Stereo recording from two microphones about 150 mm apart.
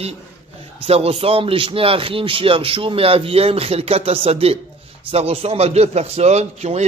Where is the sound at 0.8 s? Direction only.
40° right (ahead or behind).